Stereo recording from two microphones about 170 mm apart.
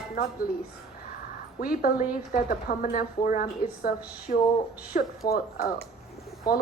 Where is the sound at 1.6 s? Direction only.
60° left (ahead or behind).